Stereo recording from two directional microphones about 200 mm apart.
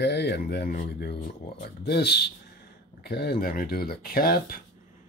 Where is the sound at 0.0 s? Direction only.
55° left (ahead or behind).